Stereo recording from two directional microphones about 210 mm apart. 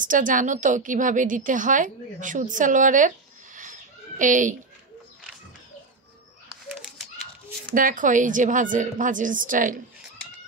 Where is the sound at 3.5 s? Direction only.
35° right (ahead or behind).